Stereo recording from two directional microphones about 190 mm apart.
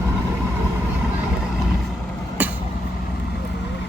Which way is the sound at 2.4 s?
10° right (ahead or behind).